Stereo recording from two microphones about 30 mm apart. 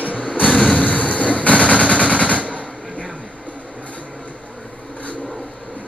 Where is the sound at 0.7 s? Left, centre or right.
Left.